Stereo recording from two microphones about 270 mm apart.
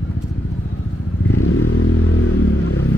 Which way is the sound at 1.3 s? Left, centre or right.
Left.